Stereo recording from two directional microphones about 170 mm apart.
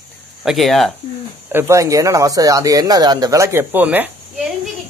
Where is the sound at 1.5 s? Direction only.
15° right (ahead or behind).